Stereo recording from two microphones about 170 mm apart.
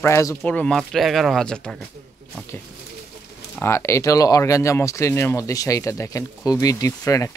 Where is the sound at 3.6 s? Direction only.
15° left (ahead or behind).